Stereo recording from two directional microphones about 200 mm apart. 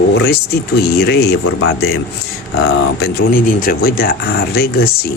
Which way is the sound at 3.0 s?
50° left (ahead or behind).